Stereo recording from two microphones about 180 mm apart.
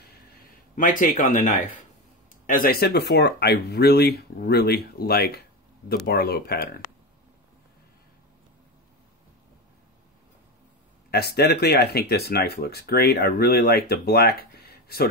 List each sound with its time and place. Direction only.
0.7 s speech: 45° left (ahead or behind)
11.1 s speech: 60° left (ahead or behind)